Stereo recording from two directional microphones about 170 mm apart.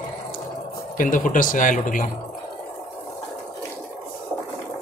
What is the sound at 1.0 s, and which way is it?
A man's voice, 50° left (ahead or behind).